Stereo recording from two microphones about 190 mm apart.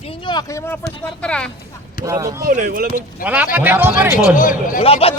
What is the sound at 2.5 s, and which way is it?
Speech, 50° right (ahead or behind).